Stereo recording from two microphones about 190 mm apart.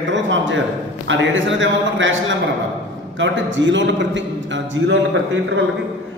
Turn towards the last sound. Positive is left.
turn(degrees=-80)